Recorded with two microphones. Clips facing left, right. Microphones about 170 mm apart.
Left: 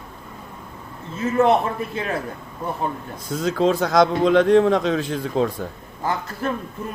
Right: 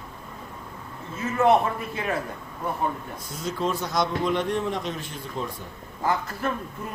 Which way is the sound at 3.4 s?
90° left.